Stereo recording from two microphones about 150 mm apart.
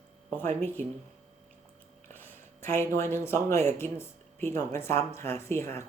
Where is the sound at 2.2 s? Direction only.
15° left (ahead or behind).